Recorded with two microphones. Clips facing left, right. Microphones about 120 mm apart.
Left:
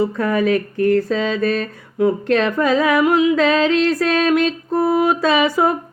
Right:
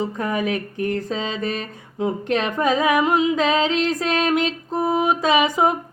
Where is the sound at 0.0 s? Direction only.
15° right (ahead or behind).